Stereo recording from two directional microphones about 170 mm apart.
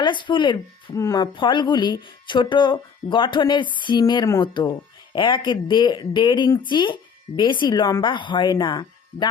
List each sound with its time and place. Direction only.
0.0 s speech: 30° left (ahead or behind)